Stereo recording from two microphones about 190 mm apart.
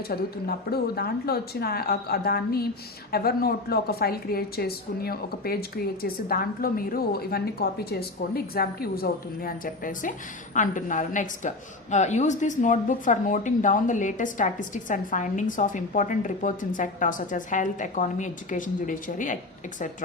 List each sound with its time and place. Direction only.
0.1 s a woman's voice: 55° left (ahead or behind)